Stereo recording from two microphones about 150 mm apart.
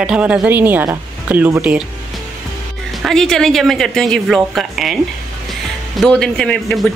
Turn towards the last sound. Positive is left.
turn(degrees=5)  # may be behind; listen again after turning